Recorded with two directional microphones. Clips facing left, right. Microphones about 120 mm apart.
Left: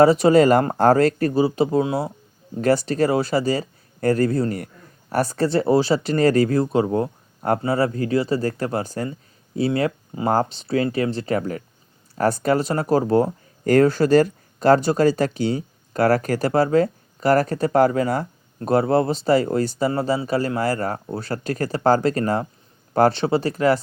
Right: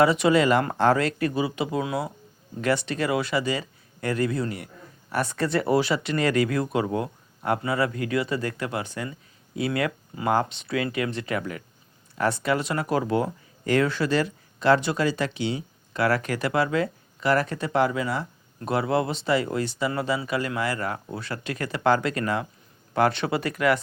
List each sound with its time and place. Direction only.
0.0 s speech: 40° left (ahead or behind)